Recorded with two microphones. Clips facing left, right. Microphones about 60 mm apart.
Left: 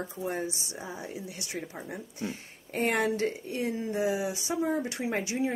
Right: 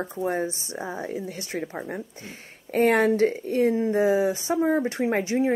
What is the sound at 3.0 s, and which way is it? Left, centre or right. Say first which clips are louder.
Speech: right 8 dB; right.